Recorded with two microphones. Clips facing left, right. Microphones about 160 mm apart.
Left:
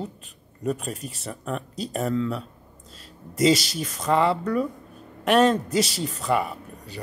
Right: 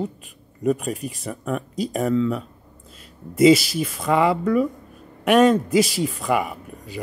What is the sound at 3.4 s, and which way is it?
A man's voice, 5° right (ahead or behind).